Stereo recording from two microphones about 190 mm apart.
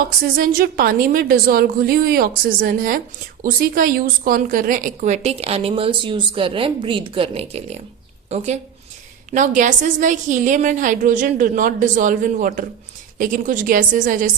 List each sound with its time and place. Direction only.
0.3 s a woman's voice: 50° right (ahead or behind); by 7.8 s 30° right (ahead or behind)
9.3 s a woman's voice: 40° right (ahead or behind)